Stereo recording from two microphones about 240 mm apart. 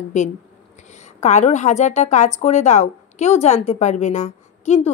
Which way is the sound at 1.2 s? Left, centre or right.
Left.